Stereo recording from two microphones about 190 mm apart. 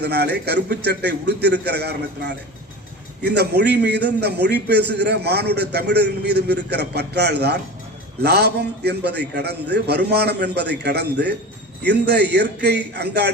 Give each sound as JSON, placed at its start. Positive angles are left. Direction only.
{"t": 0.0, "sound": "a man's voice", "side_deg": -60}